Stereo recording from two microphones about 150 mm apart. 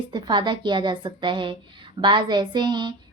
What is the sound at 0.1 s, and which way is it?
A woman's voice, 30° right (ahead or behind).